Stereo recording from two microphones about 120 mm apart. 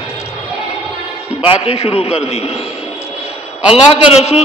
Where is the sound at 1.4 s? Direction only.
50° left (ahead or behind).